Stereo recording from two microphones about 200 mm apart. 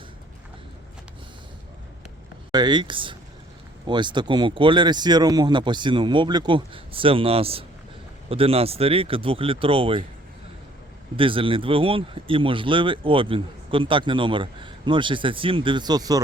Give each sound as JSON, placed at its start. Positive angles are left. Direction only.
{"t": 2.5, "sound": "speech", "side_deg": -20}
{"t": 11.2, "sound": "speech", "side_deg": -25}